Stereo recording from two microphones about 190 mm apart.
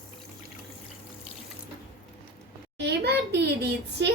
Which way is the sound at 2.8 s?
60° right (ahead or behind).